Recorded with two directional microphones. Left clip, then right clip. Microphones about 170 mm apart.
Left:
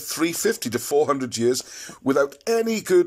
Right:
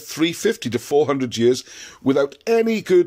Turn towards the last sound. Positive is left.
turn(degrees=-20)  # may be behind; listen again after turning